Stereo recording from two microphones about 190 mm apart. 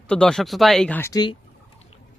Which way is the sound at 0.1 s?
5° left (ahead or behind).